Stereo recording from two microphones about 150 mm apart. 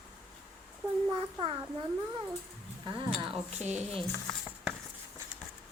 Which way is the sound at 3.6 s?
50° right (ahead or behind).